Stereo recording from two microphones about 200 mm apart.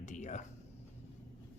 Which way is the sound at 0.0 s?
35° left (ahead or behind).